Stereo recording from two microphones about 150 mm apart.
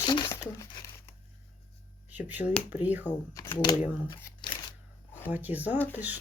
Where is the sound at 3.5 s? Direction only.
30° left (ahead or behind).